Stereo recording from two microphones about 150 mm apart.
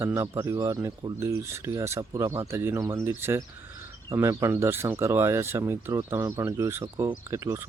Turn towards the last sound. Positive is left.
turn(degrees=-15)  # may be behind; listen again after turning